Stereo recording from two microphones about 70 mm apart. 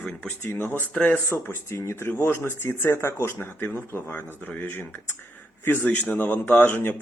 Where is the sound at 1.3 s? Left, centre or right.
Left.